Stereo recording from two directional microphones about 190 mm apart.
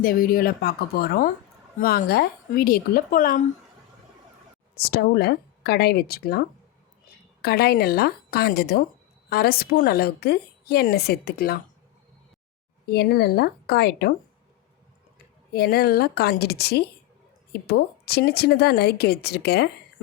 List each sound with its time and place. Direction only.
0.0 s speech: 50° left (ahead or behind)
4.7 s a woman's voice: 55° left (ahead or behind)
7.4 s a woman's voice: 55° left (ahead or behind)
12.8 s a woman's voice: 55° left (ahead or behind)
15.5 s a woman's voice: 55° left (ahead or behind)